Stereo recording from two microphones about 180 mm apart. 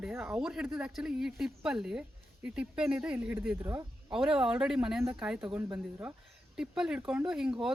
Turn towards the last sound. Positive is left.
turn(degrees=-5)  # may be behind; listen again after turning